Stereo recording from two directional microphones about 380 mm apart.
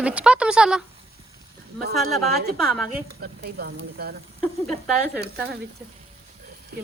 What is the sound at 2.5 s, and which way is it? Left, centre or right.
Speech, centre.